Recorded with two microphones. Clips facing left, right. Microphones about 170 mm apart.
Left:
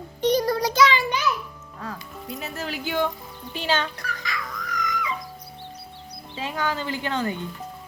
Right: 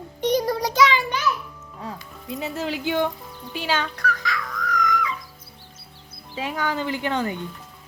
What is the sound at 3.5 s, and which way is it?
Fowl, 10° right (ahead or behind).